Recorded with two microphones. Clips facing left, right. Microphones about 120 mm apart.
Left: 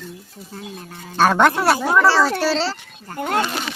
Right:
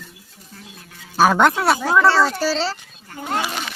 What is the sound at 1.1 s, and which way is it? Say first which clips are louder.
Speech: even; centre (ahead or behind).